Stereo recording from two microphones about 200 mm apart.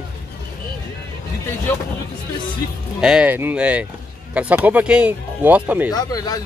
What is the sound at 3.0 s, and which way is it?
Speech, 5° right (ahead or behind).